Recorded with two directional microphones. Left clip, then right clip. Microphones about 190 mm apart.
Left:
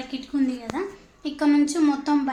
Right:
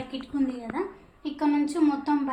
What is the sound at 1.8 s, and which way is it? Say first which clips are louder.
Speech: right 1 dB; 40° left (ahead or behind).